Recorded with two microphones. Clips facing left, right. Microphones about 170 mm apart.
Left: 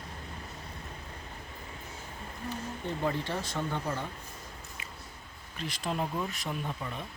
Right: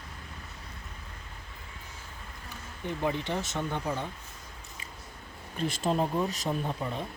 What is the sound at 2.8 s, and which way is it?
Speech, 15° right (ahead or behind).